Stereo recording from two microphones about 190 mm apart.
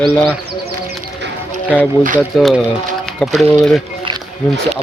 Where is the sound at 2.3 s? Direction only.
Centre (ahead or behind).